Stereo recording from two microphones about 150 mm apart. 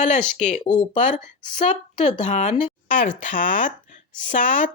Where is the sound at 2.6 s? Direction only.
60° left (ahead or behind).